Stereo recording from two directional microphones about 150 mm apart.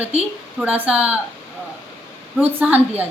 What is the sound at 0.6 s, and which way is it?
Speech, 10° right (ahead or behind).